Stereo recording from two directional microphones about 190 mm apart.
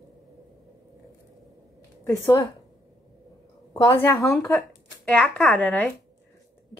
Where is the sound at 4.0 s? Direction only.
15° left (ahead or behind).